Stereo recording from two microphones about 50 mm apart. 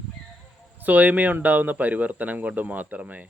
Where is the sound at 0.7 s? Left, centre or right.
Right.